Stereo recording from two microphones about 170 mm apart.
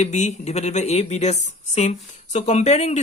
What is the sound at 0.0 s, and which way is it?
Speech, 40° left (ahead or behind).